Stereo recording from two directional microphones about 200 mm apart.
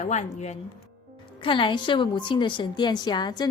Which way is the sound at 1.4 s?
25° left (ahead or behind).